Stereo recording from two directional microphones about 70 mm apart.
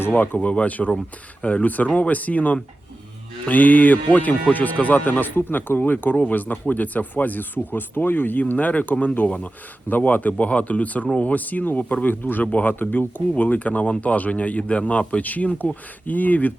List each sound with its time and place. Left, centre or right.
0.0 s speech: left